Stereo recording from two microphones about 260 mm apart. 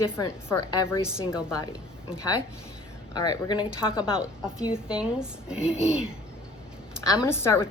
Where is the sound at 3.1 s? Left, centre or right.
Centre.